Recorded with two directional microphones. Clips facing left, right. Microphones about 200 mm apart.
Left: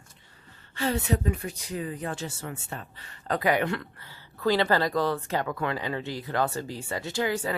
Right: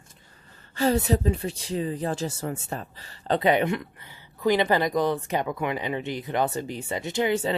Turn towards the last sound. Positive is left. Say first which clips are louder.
# right 4 dB
turn(degrees=-25)  # may be behind; listen again after turning